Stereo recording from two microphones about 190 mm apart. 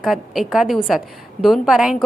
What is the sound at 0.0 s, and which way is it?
A woman's voice, centre (ahead or behind).